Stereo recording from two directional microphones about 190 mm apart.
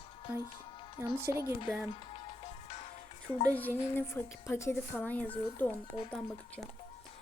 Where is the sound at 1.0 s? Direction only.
10° right (ahead or behind).